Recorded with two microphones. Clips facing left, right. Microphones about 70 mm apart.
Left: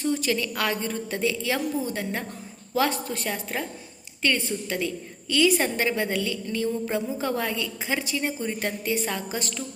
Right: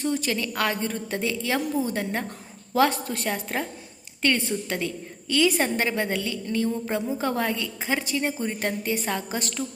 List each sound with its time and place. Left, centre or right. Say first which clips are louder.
0.0 s a woman's voice: even; right
0.3 s a woman's voice: even; right